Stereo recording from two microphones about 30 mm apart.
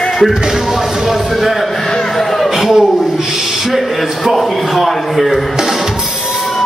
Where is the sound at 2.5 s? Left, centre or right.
Centre.